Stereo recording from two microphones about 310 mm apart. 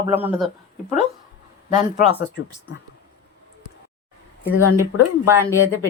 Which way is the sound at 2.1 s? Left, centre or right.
Left.